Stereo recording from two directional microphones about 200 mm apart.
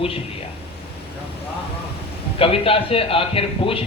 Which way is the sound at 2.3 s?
30° left (ahead or behind).